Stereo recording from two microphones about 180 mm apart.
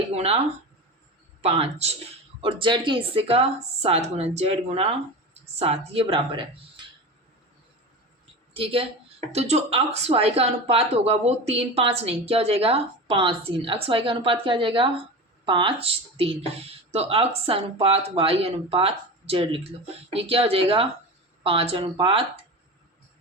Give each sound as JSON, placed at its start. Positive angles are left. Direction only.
{"t": 0.1, "sound": "speech", "side_deg": -35}
{"t": 1.4, "sound": "speech", "side_deg": -35}
{"t": 8.5, "sound": "speech", "side_deg": -30}